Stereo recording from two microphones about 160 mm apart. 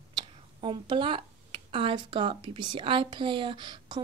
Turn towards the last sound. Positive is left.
turn(degrees=-30)  # may be behind; listen again after turning